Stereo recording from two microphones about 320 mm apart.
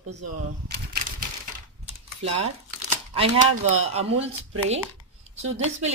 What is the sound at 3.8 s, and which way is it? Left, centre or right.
Speech, centre.